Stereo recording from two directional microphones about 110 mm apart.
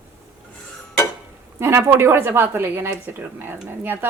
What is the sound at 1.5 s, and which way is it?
A woman's voice, 25° right (ahead or behind).